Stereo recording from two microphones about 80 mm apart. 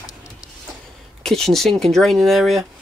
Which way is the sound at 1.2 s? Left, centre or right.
Centre.